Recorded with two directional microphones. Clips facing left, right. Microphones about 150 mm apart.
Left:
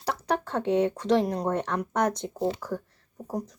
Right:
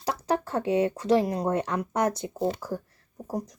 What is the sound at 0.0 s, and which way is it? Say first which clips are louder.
Speech: right 1 dB; 10° right (ahead or behind).